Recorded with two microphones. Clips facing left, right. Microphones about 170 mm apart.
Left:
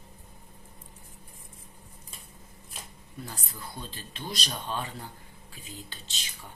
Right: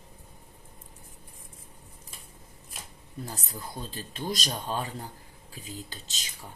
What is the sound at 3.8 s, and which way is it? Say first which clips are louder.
Speech: right 5 dB; 40° right (ahead or behind).